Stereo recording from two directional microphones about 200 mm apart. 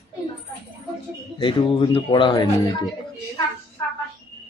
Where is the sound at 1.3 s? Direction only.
25° left (ahead or behind).